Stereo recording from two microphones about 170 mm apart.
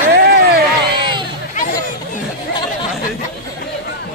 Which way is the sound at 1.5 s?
50° left (ahead or behind).